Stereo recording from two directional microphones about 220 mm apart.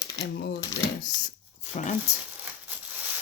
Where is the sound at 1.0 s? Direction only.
35° left (ahead or behind).